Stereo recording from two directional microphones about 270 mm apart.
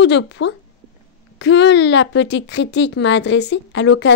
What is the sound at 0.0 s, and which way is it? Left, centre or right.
Speech, left.